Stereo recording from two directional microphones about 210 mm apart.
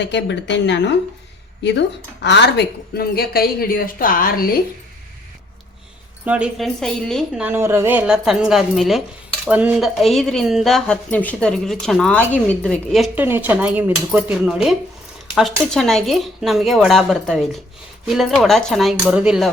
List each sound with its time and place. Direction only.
0.0 s speech: 55° left (ahead or behind)
2.2 s a woman's voice: 55° left (ahead or behind)
6.2 s speech: 5° right (ahead or behind)